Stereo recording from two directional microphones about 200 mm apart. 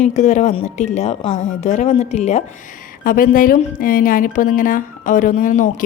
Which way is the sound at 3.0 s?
45° left (ahead or behind).